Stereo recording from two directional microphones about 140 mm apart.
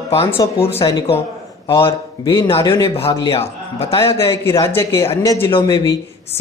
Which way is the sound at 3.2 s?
45° left (ahead or behind).